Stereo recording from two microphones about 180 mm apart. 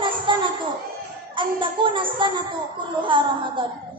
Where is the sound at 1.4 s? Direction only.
25° right (ahead or behind).